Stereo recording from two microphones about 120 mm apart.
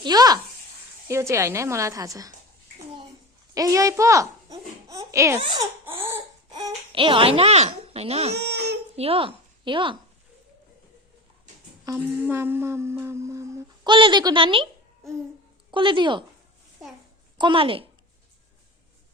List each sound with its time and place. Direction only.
0.0 s a woman's voice: 35° right (ahead or behind)
3.5 s a child's voice: 30° right (ahead or behind)
5.4 s a woman's voice: 40° right (ahead or behind)
6.0 s baby cry: 20° right (ahead or behind)
6.5 s babbling: 35° right (ahead or behind)
6.9 s a woman's voice: 45° right (ahead or behind)
11.9 s a woman's voice: 35° right (ahead or behind)
12.2 s humming: 20° right (ahead or behind)
13.8 s a woman's voice: 40° right (ahead or behind)
15.7 s a woman's voice: 40° right (ahead or behind)
17.3 s a woman's voice: 45° right (ahead or behind)